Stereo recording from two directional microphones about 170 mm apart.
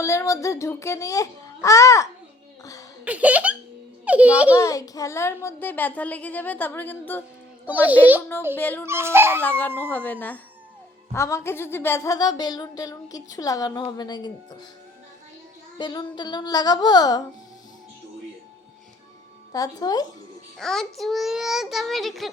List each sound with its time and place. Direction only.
0.0 s speech: 15° left (ahead or behind)
3.0 s a child's voice: 10° right (ahead or behind)
4.5 s a child's voice: 20° left (ahead or behind)
7.6 s a child's voice: 10° right (ahead or behind)
8.5 s a child's voice: 10° left (ahead or behind)
8.9 s a child's voice: 15° right (ahead or behind)
9.4 s a child's voice: 10° left (ahead or behind)
15.8 s speech: 25° left (ahead or behind)
19.5 s speech: 20° left (ahead or behind)
20.6 s child singing: centre (ahead or behind)